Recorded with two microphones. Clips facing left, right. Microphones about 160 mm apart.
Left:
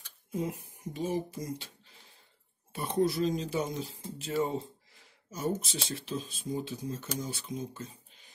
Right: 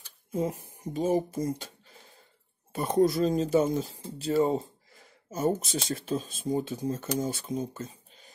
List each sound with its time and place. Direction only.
0.3 s speech: 40° right (ahead or behind)
2.7 s speech: 45° right (ahead or behind)